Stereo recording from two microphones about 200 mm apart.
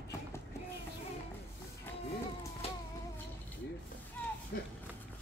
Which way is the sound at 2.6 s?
30° left (ahead or behind).